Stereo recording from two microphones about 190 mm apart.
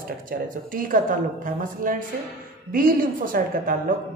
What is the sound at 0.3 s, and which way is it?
A woman's voice, 45° right (ahead or behind).